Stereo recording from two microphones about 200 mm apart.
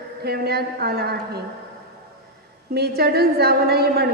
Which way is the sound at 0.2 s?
55° right (ahead or behind).